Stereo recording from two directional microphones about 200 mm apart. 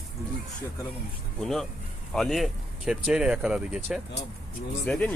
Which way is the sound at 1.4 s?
Centre (ahead or behind).